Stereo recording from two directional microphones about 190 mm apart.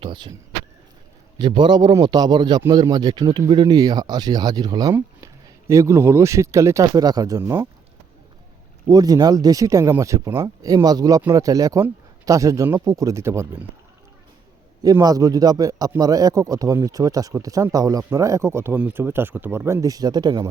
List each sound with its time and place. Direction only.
0.0 s a man's voice: 25° right (ahead or behind)
1.4 s a man's voice: 25° right (ahead or behind)
8.9 s a man's voice: 20° right (ahead or behind)
14.8 s a man's voice: 20° right (ahead or behind)